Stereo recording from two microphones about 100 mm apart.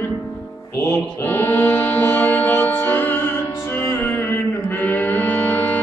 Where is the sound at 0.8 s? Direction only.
20° left (ahead or behind).